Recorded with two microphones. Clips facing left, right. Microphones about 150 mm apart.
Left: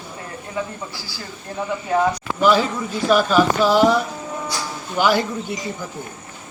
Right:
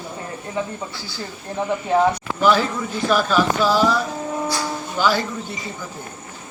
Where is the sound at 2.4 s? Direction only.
10° left (ahead or behind).